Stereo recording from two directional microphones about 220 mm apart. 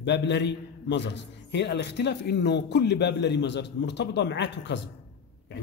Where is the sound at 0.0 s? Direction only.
50° left (ahead or behind).